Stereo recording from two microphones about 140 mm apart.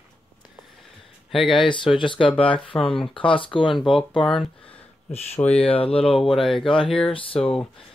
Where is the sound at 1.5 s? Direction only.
35° left (ahead or behind).